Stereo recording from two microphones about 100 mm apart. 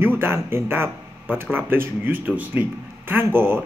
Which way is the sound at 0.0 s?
25° right (ahead or behind).